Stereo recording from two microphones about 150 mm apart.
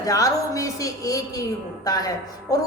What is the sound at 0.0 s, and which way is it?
A woman's voice, 25° left (ahead or behind).